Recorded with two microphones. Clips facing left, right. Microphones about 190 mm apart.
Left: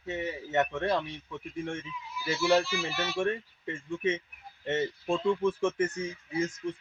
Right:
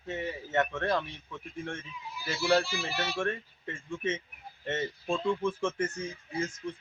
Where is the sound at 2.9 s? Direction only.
15° right (ahead or behind).